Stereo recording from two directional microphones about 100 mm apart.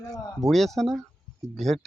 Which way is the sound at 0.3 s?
Centre (ahead or behind).